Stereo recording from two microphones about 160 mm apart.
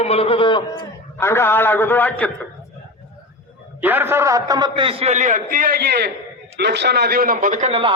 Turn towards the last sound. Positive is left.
turn(degrees=-40)  # may be behind; listen again after turning